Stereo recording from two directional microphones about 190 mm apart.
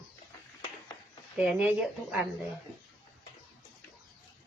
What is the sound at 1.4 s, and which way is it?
Speech, 5° right (ahead or behind).